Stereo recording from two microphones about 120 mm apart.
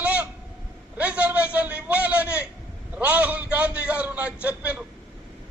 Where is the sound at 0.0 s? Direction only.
15° right (ahead or behind).